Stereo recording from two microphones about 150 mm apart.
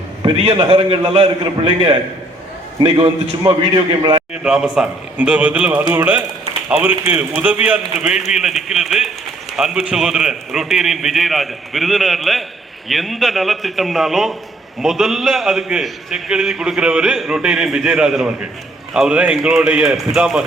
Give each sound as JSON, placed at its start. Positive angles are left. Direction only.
{"t": 0.2, "sound": "a man's voice", "side_deg": -35}
{"t": 4.4, "sound": "a man's voice", "side_deg": -5}